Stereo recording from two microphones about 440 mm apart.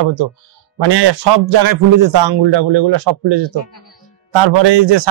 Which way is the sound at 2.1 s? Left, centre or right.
Right.